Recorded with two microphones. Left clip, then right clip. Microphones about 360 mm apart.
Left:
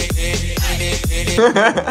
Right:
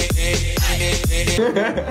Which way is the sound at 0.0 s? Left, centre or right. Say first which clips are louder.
Even; centre.